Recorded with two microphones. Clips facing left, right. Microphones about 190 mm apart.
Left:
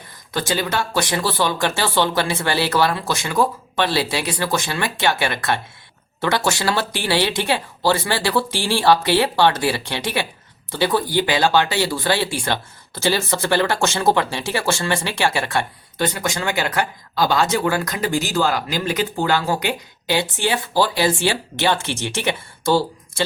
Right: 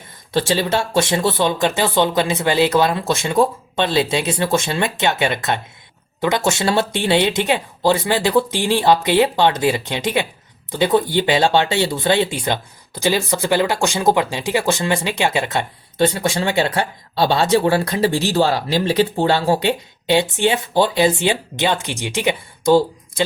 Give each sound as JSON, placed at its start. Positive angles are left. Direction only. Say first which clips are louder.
{"t": 0.3, "sound": "speech", "louder": "right 4 dB", "side_deg": -30}